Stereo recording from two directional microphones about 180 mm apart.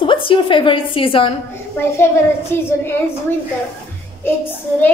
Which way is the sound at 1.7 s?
15° left (ahead or behind).